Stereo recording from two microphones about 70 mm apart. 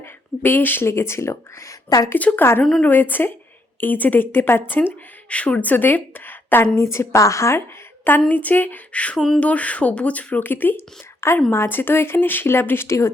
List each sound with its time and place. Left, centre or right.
0.0 s speech: left
2.1 s speech: left
2.4 s speech: left
5.3 s a woman's voice: centre
6.7 s speech: left
8.3 s speech: left
9.1 s a sound: centre
9.4 s speech: left